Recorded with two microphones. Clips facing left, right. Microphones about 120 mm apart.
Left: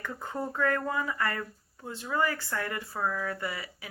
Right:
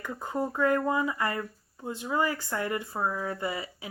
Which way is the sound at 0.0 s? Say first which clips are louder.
Right 3 dB; 15° right (ahead or behind).